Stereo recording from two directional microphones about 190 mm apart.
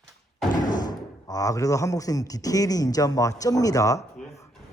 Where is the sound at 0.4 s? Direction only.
20° left (ahead or behind).